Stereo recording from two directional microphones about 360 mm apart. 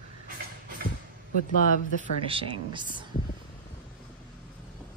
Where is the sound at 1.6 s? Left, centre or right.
Left.